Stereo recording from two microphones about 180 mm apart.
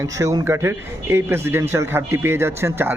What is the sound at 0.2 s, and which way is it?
Speech, 15° right (ahead or behind).